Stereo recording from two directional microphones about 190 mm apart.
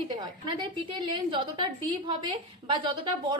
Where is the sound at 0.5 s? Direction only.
25° right (ahead or behind).